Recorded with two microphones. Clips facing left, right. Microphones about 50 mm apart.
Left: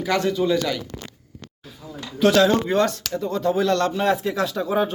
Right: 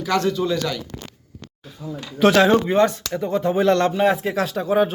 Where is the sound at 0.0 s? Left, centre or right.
Centre.